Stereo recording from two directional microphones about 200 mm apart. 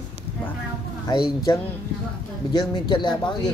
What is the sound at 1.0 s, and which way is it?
Speech, 20° left (ahead or behind).